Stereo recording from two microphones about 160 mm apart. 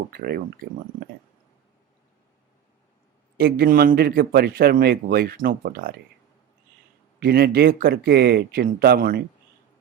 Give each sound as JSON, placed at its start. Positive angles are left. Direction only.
{"t": 0.1, "sound": "speech", "side_deg": -75}
{"t": 3.3, "sound": "speech", "side_deg": -75}
{"t": 7.2, "sound": "speech", "side_deg": -75}